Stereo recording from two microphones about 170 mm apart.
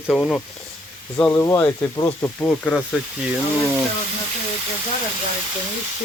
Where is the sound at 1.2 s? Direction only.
15° left (ahead or behind).